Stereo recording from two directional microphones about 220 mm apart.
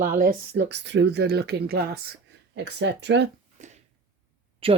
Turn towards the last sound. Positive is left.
turn(degrees=-25)  # may be behind; listen again after turning